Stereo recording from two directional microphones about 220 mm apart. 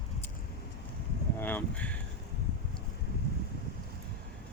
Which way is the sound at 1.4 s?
10° left (ahead or behind).